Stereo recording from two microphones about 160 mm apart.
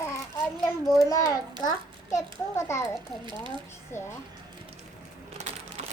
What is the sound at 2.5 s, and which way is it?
Speech, 20° left (ahead or behind).